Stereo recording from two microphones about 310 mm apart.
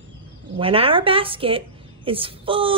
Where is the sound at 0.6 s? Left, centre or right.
Centre.